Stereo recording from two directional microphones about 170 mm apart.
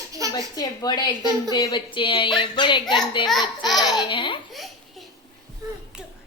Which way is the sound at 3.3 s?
Centre (ahead or behind).